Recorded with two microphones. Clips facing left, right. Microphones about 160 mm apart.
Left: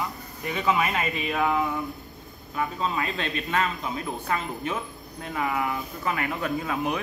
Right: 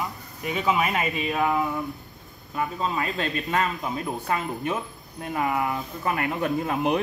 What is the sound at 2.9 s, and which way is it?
Speech, 40° right (ahead or behind).